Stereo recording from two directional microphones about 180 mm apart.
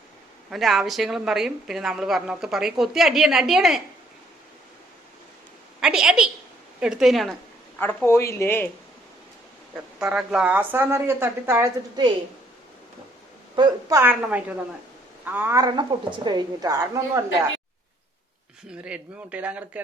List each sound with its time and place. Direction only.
0.5 s a woman's voice: centre (ahead or behind)
5.8 s a woman's voice: 5° right (ahead or behind)
7.8 s speech: 10° left (ahead or behind)
10.0 s speech: 5° right (ahead or behind)
13.6 s a woman's voice: 15° right (ahead or behind)
18.7 s speech: 5° right (ahead or behind)